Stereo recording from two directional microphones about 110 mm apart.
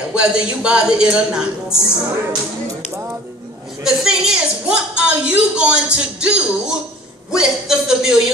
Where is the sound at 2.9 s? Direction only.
20° right (ahead or behind).